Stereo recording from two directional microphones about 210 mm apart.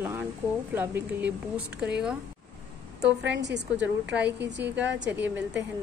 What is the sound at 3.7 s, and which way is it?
Speech, 5° right (ahead or behind).